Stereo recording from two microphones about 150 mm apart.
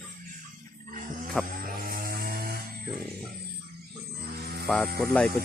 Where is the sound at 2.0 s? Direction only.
80° right.